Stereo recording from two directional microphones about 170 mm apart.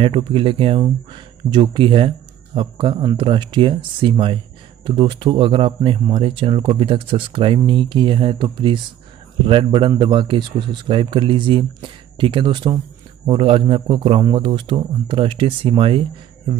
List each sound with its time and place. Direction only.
0.0 s speech: 30° right (ahead or behind)